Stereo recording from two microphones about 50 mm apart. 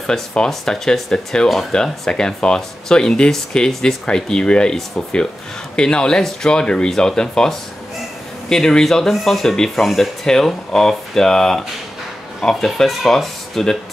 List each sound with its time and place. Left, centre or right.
0.0 s speech: centre